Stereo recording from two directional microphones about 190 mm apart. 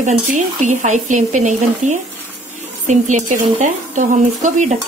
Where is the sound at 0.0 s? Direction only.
40° right (ahead or behind).